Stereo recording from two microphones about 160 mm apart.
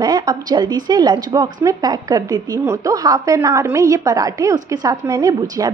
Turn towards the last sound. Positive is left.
turn(degrees=-25)  # may be behind; listen again after turning